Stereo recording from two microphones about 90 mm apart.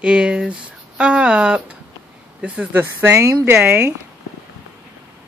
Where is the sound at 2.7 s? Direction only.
25° right (ahead or behind).